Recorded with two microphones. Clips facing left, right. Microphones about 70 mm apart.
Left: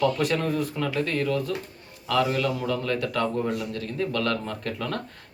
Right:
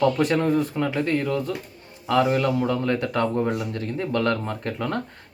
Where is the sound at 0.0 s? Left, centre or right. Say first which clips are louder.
Right 3 dB; right.